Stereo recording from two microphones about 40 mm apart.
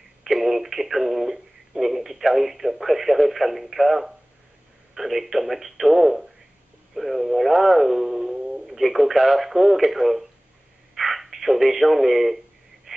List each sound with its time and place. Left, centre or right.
0.2 s speech: centre
12.9 s wheeze: centre